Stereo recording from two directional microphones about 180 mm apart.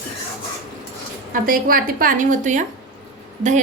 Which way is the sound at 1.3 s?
50° right (ahead or behind).